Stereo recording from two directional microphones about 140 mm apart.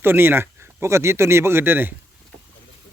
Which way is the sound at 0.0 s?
15° right (ahead or behind).